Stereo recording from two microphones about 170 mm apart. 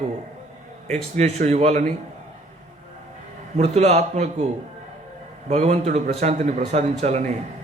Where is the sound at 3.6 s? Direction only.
40° right (ahead or behind).